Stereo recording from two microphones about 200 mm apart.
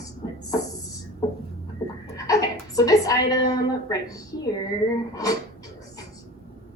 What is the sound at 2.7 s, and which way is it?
A woman's voice, 15° left (ahead or behind).